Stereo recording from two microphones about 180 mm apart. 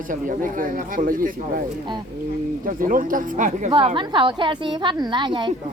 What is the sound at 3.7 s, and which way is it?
A woman's voice, 30° right (ahead or behind).